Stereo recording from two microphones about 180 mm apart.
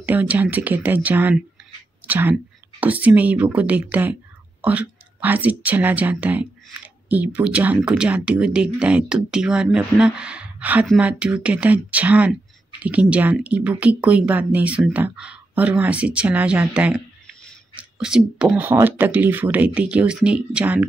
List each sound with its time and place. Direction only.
0.0 s speech: 10° right (ahead or behind)